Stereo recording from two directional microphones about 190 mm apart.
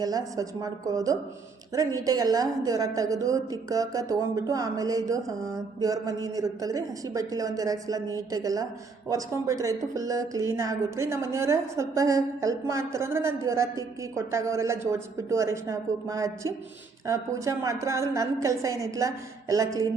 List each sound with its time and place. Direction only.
0.0 s a woman's voice: 20° right (ahead or behind)